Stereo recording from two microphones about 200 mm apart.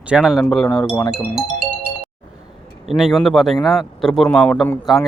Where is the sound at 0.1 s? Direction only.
5° right (ahead or behind).